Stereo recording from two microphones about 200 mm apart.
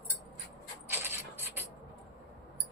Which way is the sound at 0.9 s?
10° right (ahead or behind).